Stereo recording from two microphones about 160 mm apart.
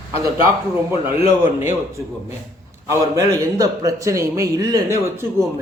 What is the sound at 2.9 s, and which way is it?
A man's voice, 20° right (ahead or behind).